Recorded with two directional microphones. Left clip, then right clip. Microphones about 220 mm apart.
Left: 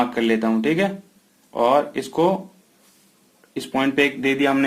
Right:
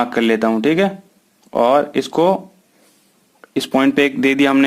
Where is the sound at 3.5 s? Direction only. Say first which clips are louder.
Right 6 dB; 50° right (ahead or behind).